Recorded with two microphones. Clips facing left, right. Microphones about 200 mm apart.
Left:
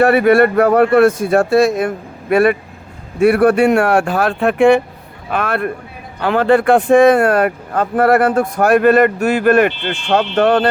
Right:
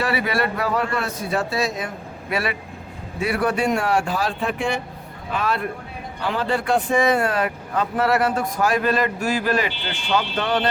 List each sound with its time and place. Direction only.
0.0 s speech: 55° left (ahead or behind)